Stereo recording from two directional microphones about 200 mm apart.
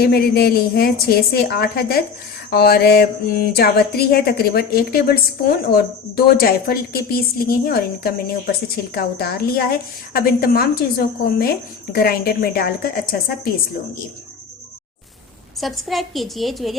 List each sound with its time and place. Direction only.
0.0 s a woman's voice: 50° left (ahead or behind)
15.6 s a woman's voice: centre (ahead or behind)